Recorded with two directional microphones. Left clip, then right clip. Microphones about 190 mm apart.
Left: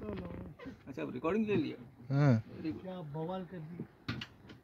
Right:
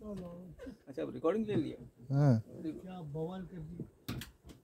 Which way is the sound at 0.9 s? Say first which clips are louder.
Right 1 dB; 55° left (ahead or behind).